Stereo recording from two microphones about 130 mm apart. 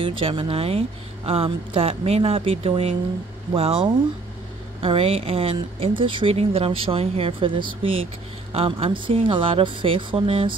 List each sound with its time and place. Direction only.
0.0 s speech: 45° right (ahead or behind)